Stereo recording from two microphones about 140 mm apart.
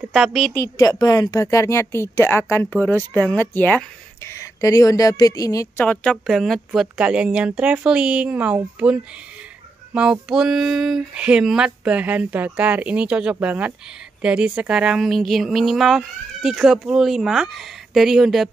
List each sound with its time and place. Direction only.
0.1 s speech: centre (ahead or behind)
0.6 s speech: 25° left (ahead or behind)
5.8 s speech: 10° left (ahead or behind); by 8.9 s 10° right (ahead or behind)
10.2 s speech: 5° right (ahead or behind)